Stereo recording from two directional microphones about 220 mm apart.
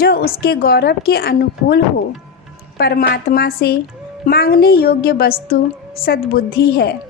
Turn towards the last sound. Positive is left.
turn(degrees=45)  # may be behind; listen again after turning